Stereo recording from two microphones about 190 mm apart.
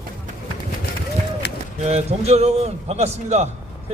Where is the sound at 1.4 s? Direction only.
60° left (ahead or behind).